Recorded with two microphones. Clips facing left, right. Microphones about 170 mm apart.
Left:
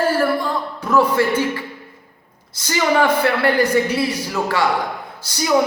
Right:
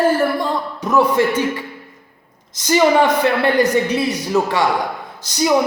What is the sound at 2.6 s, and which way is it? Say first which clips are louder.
Speech: right 4 dB; 20° right (ahead or behind).